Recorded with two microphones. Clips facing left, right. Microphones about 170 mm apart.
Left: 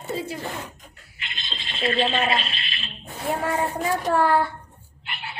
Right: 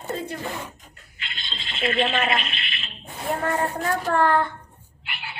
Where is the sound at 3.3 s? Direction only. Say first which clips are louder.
Even; 10° left (ahead or behind).